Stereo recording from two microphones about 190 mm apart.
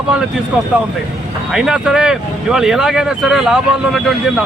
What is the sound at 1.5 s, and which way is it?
Speech, centre (ahead or behind).